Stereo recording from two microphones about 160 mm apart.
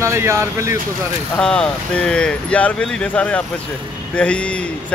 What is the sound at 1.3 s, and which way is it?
Speech, 5° left (ahead or behind).